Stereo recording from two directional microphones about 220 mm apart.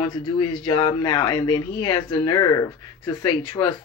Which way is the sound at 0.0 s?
20° left (ahead or behind).